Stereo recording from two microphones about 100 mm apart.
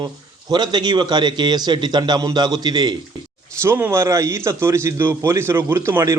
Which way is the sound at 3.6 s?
25° right (ahead or behind).